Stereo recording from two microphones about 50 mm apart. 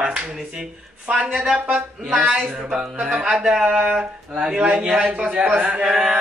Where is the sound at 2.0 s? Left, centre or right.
Centre.